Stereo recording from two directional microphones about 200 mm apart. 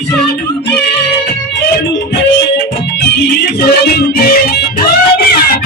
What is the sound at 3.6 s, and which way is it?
Music, 55° left (ahead or behind).